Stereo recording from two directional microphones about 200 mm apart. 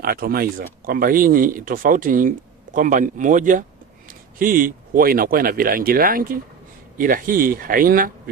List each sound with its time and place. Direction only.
0.0 s speech: 50° right (ahead or behind)